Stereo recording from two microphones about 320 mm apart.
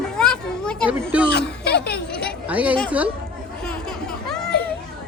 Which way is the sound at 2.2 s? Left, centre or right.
Centre.